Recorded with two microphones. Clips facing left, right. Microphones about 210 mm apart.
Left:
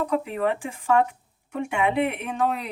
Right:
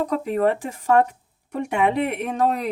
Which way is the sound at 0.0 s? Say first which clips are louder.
Right 4 dB; 40° right (ahead or behind).